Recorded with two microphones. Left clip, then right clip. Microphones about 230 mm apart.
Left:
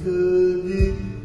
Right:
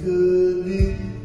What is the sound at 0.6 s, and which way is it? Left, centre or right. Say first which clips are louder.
Music: left 1 dB; left.